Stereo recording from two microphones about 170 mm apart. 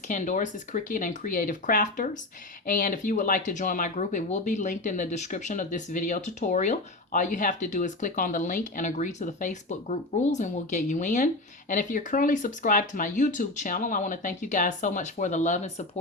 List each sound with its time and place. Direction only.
0.1 s speech: 45° left (ahead or behind)